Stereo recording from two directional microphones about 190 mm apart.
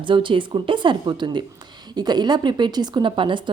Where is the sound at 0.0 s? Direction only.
25° right (ahead or behind).